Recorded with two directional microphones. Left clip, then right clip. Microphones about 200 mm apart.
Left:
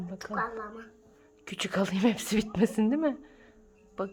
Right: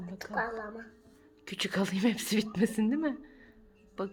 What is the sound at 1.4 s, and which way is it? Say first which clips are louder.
Speech: left 2 dB; 20° left (ahead or behind).